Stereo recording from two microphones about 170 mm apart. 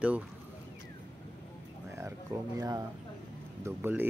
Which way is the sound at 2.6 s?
20° right (ahead or behind).